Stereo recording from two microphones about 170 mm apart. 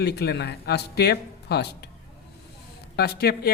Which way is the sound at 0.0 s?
70° left (ahead or behind).